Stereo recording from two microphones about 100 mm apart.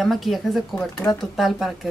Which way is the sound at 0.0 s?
Centre (ahead or behind).